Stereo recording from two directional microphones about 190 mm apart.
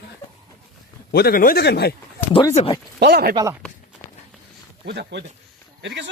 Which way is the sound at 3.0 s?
60° right (ahead or behind).